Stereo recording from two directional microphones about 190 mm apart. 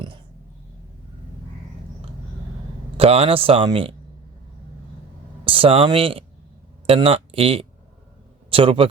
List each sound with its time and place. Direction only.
3.0 s speech: 30° right (ahead or behind)
5.5 s a man's voice: 30° right (ahead or behind)